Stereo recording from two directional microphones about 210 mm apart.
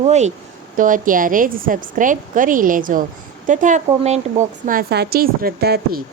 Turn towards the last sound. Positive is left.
turn(degrees=-45)  # may be behind; listen again after turning